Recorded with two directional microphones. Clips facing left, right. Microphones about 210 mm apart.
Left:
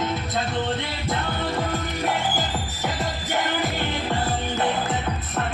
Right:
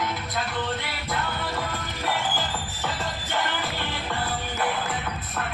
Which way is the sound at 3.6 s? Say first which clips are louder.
Left 5 dB; 20° left (ahead or behind).